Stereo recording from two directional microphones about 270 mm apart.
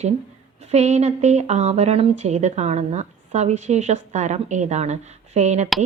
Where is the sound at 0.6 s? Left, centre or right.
Right.